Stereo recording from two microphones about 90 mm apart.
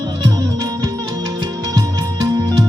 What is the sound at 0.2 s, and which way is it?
Music, 45° right (ahead or behind).